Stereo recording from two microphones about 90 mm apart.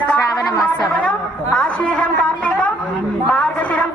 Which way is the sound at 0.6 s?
15° left (ahead or behind).